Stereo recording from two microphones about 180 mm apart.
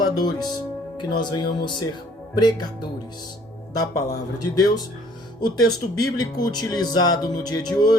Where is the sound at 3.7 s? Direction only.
20° left (ahead or behind).